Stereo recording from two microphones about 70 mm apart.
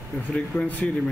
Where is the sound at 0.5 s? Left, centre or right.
Left.